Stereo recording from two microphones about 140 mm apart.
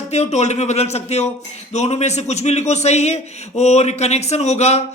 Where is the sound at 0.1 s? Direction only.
50° left (ahead or behind).